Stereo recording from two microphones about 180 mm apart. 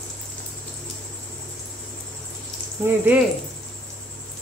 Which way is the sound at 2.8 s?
10° right (ahead or behind).